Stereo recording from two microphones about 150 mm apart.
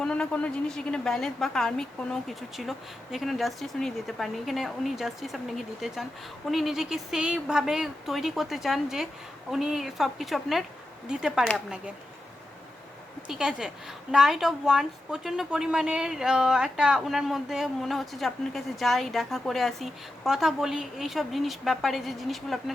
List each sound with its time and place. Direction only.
0.0 s a woman's voice: 5° left (ahead or behind)
13.2 s a woman's voice: 5° right (ahead or behind)